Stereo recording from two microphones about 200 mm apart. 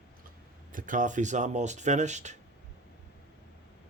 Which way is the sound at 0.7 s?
40° right (ahead or behind).